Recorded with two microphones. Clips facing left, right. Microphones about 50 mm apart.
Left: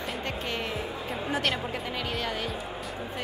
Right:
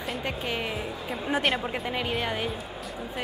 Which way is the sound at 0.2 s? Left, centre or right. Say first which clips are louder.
Right 2 dB; centre.